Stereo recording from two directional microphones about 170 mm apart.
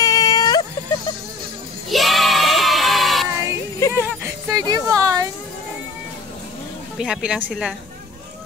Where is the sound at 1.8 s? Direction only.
Centre (ahead or behind).